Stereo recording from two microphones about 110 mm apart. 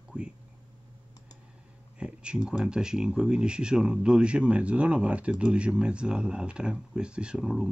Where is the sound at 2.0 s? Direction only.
10° right (ahead or behind).